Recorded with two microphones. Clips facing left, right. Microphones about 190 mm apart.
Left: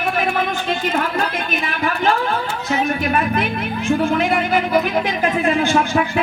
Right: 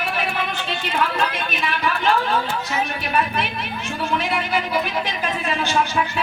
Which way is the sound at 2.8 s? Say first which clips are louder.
Left 5 dB; 50° left (ahead or behind).